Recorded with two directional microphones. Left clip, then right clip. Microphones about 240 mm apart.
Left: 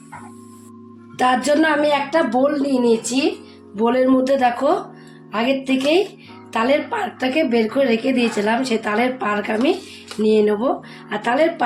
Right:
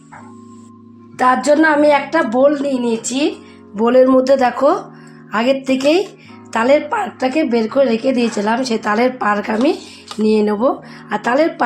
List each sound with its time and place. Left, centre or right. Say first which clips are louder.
1.1 s a woman's voice: right 4 dB; centre